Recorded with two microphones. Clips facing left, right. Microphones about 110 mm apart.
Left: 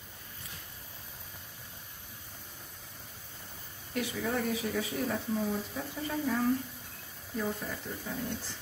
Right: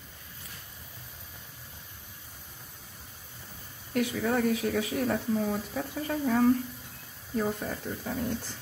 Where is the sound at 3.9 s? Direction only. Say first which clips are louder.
Right 5 dB; 60° right (ahead or behind).